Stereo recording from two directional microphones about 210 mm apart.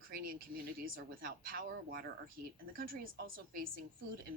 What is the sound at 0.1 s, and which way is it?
A woman's voice, 50° right (ahead or behind).